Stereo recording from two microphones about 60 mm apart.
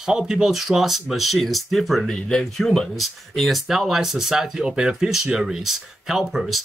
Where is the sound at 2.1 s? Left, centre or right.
Centre.